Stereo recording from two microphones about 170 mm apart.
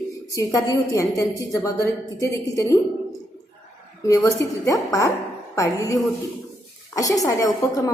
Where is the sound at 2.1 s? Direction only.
20° left (ahead or behind).